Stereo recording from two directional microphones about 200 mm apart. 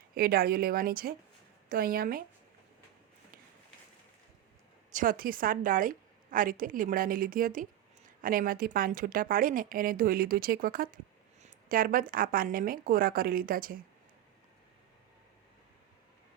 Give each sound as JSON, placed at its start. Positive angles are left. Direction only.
{"t": 0.2, "sound": "a woman's voice", "side_deg": -50}
{"t": 4.9, "sound": "a woman's voice", "side_deg": -40}